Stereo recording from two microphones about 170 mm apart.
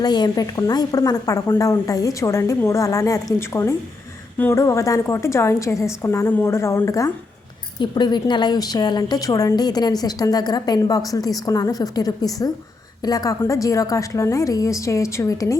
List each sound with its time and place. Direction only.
0.0 s a woman's voice: 25° left (ahead or behind)